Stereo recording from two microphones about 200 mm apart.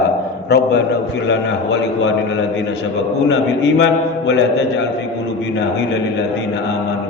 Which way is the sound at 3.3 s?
65° left (ahead or behind).